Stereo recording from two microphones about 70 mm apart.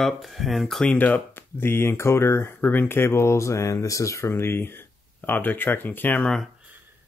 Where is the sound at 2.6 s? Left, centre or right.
Left.